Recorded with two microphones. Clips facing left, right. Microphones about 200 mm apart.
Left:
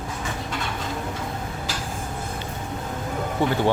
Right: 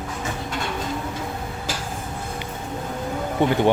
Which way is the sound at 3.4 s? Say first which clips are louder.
Right 3 dB; 20° right (ahead or behind).